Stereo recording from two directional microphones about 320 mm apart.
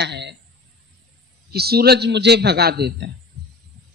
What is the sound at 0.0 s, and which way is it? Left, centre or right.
Speech, right.